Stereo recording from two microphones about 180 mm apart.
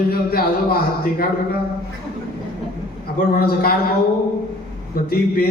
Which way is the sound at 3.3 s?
55° left (ahead or behind).